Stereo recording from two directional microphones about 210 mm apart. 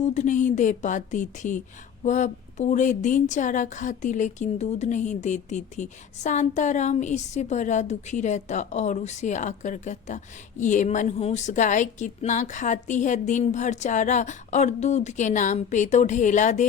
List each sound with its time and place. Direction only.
0.0 s a woman's voice: 35° left (ahead or behind)